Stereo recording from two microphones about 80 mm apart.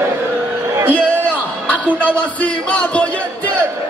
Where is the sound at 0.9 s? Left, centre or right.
Right.